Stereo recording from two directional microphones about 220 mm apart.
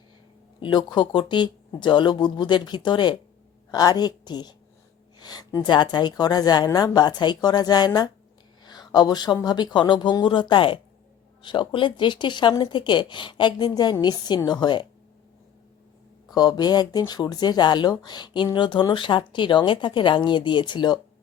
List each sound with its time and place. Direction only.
0.6 s speech: 20° left (ahead or behind)
16.3 s speech: 15° left (ahead or behind)